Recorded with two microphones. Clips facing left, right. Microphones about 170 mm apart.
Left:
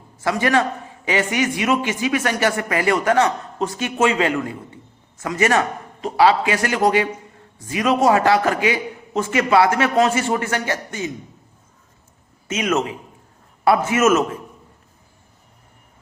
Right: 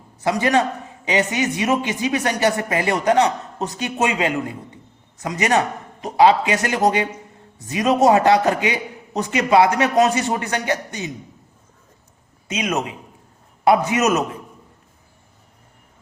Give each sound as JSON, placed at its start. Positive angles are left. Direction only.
{"t": 0.2, "sound": "a man's voice", "side_deg": -20}
{"t": 12.5, "sound": "a man's voice", "side_deg": -15}